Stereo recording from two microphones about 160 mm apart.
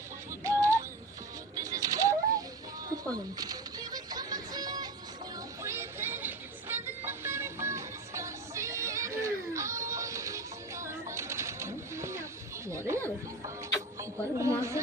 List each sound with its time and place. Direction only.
0.4 s synthetic singing: 20° right (ahead or behind)
1.5 s bird: 20° right (ahead or behind)
2.9 s music: 25° right (ahead or behind)
5.6 s vehicle: 15° right (ahead or behind)
12.6 s a sound: 20° right (ahead or behind)
14.0 s a sound: 20° right (ahead or behind)